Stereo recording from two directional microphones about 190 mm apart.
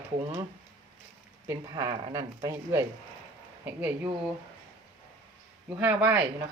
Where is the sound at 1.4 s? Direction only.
15° right (ahead or behind).